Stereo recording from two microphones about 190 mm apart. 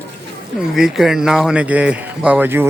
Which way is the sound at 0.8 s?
Centre (ahead or behind).